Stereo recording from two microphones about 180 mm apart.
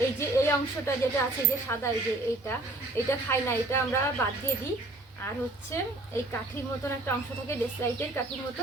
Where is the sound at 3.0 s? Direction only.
15° left (ahead or behind).